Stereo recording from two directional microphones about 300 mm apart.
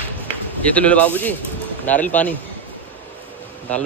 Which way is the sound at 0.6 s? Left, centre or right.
Centre.